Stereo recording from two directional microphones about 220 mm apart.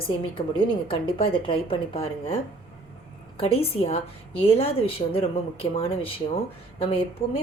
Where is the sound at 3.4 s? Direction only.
25° left (ahead or behind).